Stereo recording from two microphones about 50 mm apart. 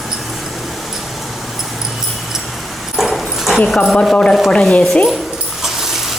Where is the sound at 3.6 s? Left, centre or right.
Centre.